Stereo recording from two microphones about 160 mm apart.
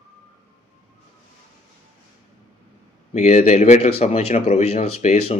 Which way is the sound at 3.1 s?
45° left (ahead or behind).